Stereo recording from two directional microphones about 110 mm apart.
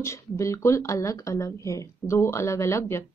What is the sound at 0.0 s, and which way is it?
Speech, 25° left (ahead or behind).